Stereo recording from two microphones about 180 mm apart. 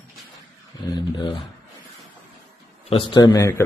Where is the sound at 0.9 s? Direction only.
20° left (ahead or behind).